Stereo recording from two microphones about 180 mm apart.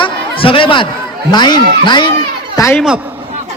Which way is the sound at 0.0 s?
30° left (ahead or behind).